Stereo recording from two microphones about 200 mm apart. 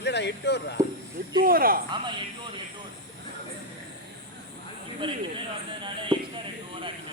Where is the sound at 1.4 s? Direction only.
45° right (ahead or behind).